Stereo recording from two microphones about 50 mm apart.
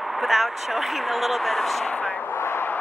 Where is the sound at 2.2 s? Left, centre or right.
Left.